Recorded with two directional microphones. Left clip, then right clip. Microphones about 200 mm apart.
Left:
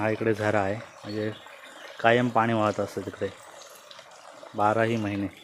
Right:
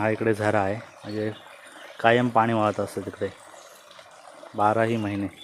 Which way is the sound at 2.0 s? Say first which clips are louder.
Right 2 dB; 15° right (ahead or behind).